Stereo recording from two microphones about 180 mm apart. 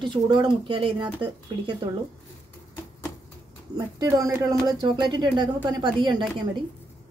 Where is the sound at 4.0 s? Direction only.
15° right (ahead or behind).